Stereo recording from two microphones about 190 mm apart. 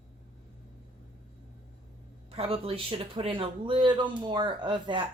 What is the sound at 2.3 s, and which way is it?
Speech, 30° right (ahead or behind).